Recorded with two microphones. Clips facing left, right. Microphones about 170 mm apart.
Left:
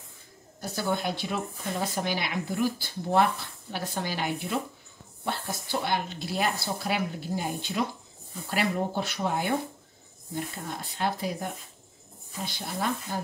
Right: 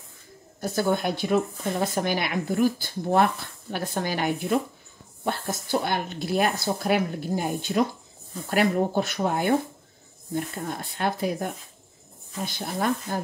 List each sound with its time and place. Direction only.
0.6 s speech: 50° right (ahead or behind)
11.0 s speech: 55° right (ahead or behind)
12.4 s speech: 50° right (ahead or behind)